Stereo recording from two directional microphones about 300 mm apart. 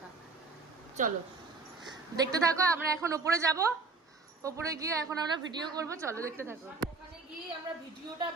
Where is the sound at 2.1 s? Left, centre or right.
Centre.